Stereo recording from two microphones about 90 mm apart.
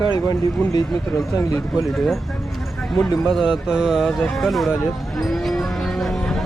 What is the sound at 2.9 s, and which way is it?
Speech, centre (ahead or behind).